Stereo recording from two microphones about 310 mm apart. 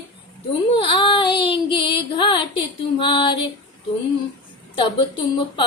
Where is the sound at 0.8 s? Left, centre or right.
Centre.